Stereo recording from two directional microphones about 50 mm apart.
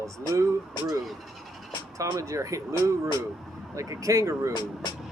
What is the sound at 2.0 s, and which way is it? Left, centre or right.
Speech, right.